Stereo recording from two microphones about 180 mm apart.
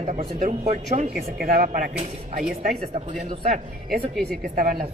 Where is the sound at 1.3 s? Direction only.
50° right (ahead or behind).